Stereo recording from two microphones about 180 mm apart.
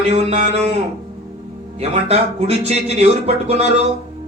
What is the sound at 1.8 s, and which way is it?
Speech, 35° right (ahead or behind).